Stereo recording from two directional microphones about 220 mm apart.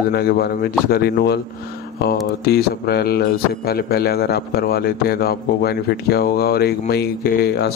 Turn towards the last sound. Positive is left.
turn(degrees=45)  # may be behind; listen again after turning